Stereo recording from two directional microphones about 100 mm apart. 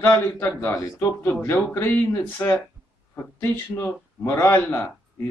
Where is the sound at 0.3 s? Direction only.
20° left (ahead or behind).